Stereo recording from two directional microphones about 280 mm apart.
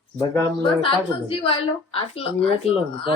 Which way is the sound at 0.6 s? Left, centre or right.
Centre.